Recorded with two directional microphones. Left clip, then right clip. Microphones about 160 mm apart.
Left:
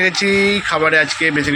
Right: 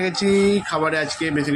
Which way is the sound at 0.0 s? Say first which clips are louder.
Left 5 dB; centre (ahead or behind).